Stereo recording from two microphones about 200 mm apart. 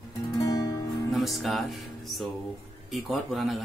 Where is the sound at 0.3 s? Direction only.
15° left (ahead or behind).